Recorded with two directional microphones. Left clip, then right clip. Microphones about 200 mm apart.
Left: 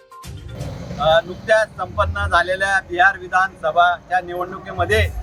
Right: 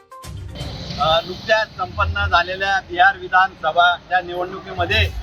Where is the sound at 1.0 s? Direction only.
25° left (ahead or behind).